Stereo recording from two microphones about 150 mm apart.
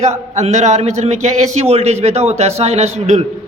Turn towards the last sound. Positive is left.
turn(degrees=-45)  # may be behind; listen again after turning